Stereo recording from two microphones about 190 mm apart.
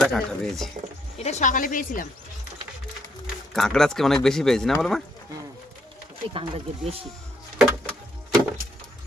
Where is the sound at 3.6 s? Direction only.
Centre (ahead or behind).